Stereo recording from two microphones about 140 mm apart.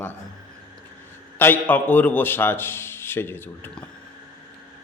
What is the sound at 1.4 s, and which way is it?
A man's voice, 15° left (ahead or behind).